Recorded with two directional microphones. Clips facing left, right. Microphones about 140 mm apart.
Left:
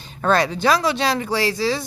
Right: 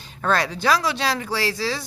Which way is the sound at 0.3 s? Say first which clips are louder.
Left 3 dB; 20° left (ahead or behind).